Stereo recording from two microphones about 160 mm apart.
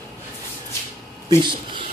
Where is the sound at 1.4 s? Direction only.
30° right (ahead or behind).